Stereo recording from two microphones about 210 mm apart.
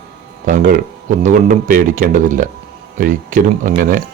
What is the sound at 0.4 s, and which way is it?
Speech, 45° right (ahead or behind).